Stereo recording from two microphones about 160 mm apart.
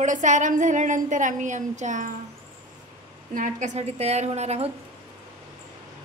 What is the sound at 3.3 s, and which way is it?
A woman's voice, 55° right (ahead or behind).